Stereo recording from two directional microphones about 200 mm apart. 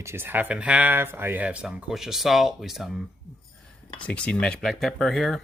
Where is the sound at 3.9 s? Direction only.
5° left (ahead or behind).